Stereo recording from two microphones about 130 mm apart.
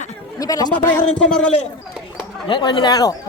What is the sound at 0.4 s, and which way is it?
Speech, 25° left (ahead or behind).